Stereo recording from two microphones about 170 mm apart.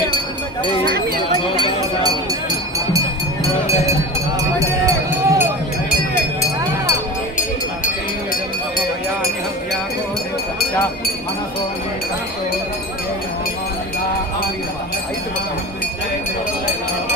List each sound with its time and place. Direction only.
0.6 s speech: 25° left (ahead or behind)
4.6 s run: 20° right (ahead or behind)